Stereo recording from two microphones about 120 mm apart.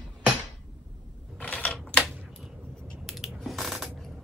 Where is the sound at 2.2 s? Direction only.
5° left (ahead or behind).